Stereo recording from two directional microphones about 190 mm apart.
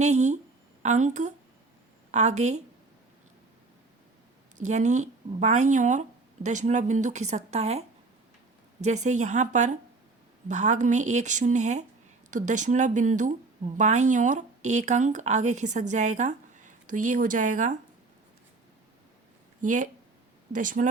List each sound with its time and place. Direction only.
0.0 s speech: 35° right (ahead or behind)
4.5 s speech: 40° right (ahead or behind)
19.6 s speech: 40° right (ahead or behind)